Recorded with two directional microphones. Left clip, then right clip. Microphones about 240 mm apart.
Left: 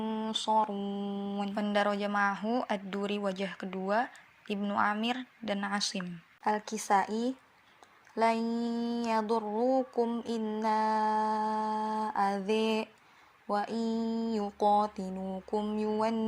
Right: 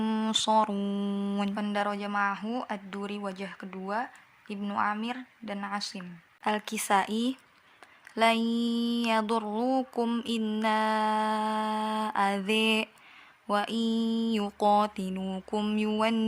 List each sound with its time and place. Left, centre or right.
0.0 s mantra: right
1.5 s a woman's voice: centre
6.4 s a woman's voice: centre
8.1 s a sound: centre